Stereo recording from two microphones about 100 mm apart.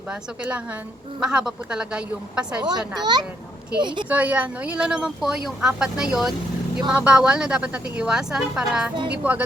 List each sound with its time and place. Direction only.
0.1 s speech: 15° right (ahead or behind)
3.0 s a child's voice: 45° right (ahead or behind)
4.1 s speech: 15° right (ahead or behind)